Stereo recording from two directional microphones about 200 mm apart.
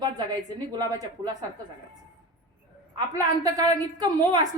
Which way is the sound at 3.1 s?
20° right (ahead or behind).